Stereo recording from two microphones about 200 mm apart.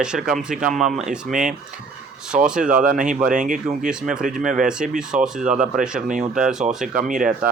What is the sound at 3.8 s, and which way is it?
Speech, 5° right (ahead or behind).